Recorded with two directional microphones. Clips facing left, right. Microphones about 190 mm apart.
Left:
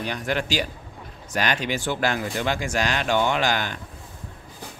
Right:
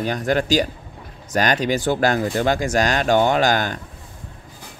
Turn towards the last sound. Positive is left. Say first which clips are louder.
# right 6 dB
turn(degrees=-40)  # may be behind; listen again after turning